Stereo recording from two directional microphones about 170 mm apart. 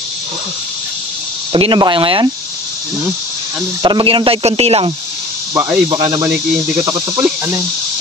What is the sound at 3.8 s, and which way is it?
Mantra, 30° right (ahead or behind).